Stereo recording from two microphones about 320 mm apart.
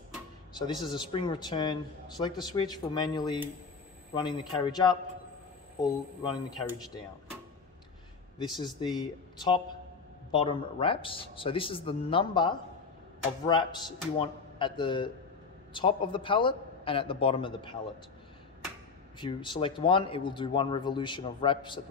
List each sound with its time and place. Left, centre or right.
0.6 s a man's voice: centre
8.6 s a man's voice: centre
19.1 s a man's voice: centre